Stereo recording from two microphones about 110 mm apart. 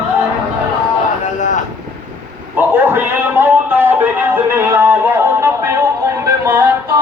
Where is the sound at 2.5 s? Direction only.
20° right (ahead or behind).